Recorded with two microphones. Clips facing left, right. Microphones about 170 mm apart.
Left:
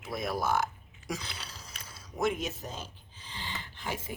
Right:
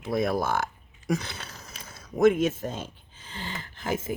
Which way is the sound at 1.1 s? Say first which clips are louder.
Right 9 dB; 55° right (ahead or behind).